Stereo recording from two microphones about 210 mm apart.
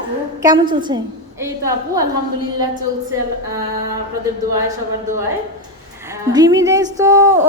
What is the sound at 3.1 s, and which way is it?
Speech, 15° right (ahead or behind).